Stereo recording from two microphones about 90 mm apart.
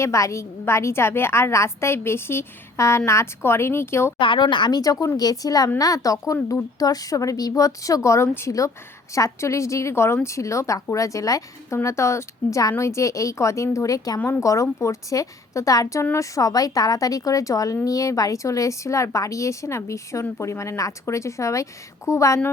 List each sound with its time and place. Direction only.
0.0 s a woman's voice: 35° left (ahead or behind)
4.2 s speech: 65° left (ahead or behind)
4.8 s a woman's voice: 40° left (ahead or behind)